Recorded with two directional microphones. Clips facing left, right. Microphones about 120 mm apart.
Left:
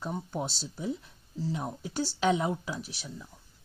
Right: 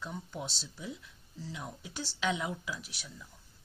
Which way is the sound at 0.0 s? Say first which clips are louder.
Left 6 dB; 40° left (ahead or behind).